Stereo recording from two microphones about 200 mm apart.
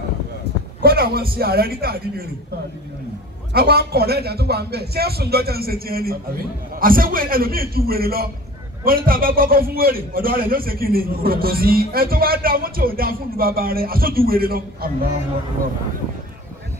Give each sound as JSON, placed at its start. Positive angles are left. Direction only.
{"t": 0.8, "sound": "a man's voice", "side_deg": -50}
{"t": 3.5, "sound": "a man's voice", "side_deg": -50}